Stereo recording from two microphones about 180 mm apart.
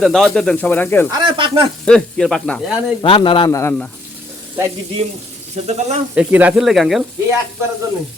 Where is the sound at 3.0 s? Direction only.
30° left (ahead or behind).